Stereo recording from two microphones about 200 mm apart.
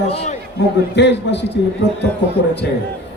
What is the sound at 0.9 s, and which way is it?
Speech, 60° left (ahead or behind).